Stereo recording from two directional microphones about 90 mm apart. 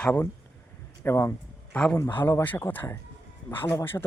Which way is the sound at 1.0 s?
30° left (ahead or behind).